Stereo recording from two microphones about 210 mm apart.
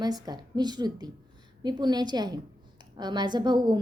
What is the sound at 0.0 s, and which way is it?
A woman's voice, 20° right (ahead or behind).